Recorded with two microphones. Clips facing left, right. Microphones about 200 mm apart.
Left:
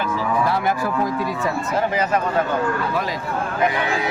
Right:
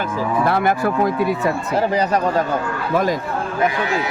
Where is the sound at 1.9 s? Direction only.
35° right (ahead or behind).